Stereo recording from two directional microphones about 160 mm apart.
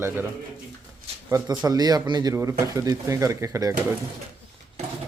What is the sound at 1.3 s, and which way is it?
Speech, 25° right (ahead or behind).